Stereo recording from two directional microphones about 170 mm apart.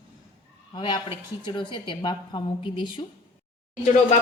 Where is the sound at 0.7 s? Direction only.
25° left (ahead or behind).